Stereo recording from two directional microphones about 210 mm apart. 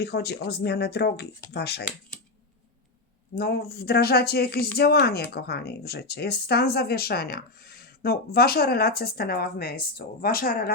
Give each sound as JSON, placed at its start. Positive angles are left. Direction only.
{"t": 0.0, "sound": "speech", "side_deg": 50}
{"t": 3.3, "sound": "speech", "side_deg": 50}